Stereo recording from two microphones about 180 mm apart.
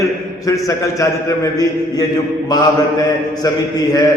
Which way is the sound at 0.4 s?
15° left (ahead or behind).